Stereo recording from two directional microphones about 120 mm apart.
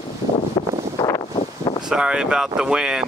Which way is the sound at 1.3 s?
45° left (ahead or behind).